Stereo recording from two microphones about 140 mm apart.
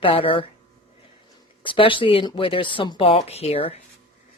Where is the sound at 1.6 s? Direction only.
35° left (ahead or behind).